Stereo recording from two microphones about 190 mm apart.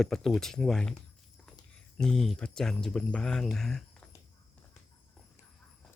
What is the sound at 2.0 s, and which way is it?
Speech, centre (ahead or behind).